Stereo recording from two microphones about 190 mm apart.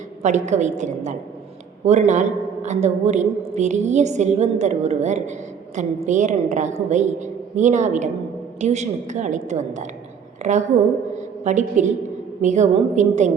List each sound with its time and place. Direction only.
0.2 s a woman's voice: 40° right (ahead or behind)
11.2 s a sound: 40° right (ahead or behind)
12.4 s a woman's voice: 40° right (ahead or behind)